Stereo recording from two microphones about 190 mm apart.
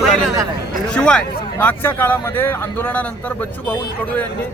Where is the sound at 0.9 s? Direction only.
5° left (ahead or behind).